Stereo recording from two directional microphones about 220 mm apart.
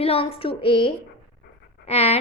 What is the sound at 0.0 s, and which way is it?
A woman's voice, 25° left (ahead or behind).